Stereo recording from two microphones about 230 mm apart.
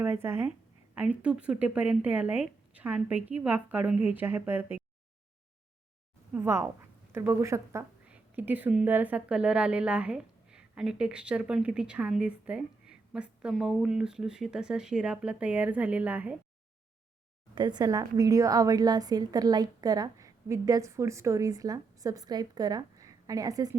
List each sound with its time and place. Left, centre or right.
0.0 s a woman's voice: centre
6.3 s a woman's voice: centre
17.5 s a woman's voice: centre